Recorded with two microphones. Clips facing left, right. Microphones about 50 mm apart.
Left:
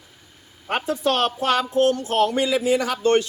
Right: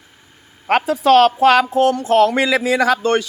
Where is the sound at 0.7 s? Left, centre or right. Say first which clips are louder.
Right 9 dB; right.